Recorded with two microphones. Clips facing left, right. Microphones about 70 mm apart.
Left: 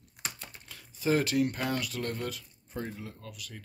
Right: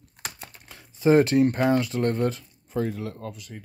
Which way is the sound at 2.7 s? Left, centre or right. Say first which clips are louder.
Right 10 dB; right.